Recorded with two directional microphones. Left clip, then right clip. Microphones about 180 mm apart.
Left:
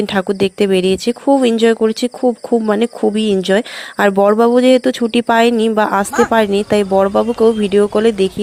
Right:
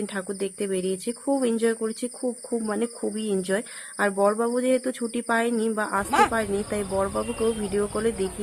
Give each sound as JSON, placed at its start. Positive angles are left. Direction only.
{"t": 0.0, "sound": "speech", "side_deg": 45}